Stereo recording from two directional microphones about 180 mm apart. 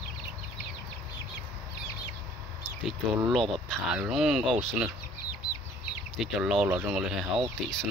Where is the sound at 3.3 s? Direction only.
Centre (ahead or behind).